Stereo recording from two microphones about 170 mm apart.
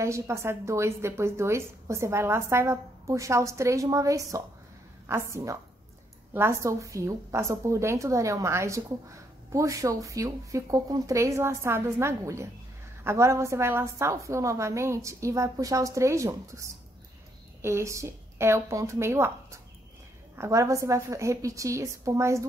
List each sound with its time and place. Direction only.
0.0 s a woman's voice: 15° right (ahead or behind)